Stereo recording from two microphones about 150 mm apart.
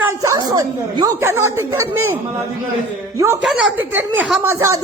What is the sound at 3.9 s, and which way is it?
Speech, 10° right (ahead or behind).